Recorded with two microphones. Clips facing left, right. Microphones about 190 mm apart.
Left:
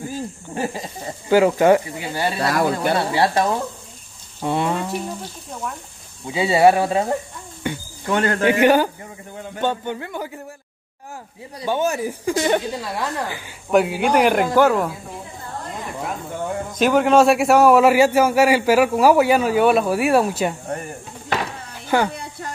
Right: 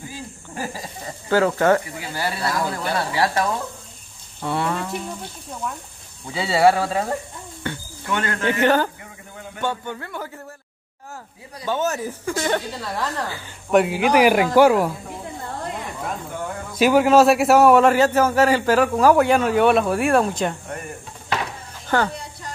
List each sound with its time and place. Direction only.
0.6 s speech: 20° left (ahead or behind)
2.4 s speech: 70° left (ahead or behind)
2.7 s speech: 25° left (ahead or behind)
6.2 s speech: 15° left (ahead or behind)
7.6 s a sound: 15° left (ahead or behind)
8.1 s a man's voice: 35° left (ahead or behind)
8.5 s speech: 10° left (ahead or behind)
11.6 s speech: 15° left (ahead or behind)
13.7 s speech: centre (ahead or behind)
16.7 s a man's voice: 5° right (ahead or behind)
21.8 s speech: 10° left (ahead or behind)